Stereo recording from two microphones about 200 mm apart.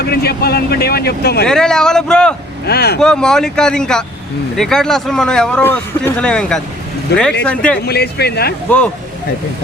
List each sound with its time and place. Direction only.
0.0 s speech: 50° left (ahead or behind)
1.5 s speech: 5° left (ahead or behind)
2.6 s speech: 55° left (ahead or behind)
3.0 s speech: 5° left (ahead or behind)
7.8 s speech: 55° left (ahead or behind)